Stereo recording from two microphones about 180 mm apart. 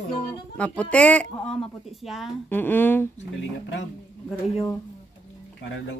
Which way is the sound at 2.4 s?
10° left (ahead or behind).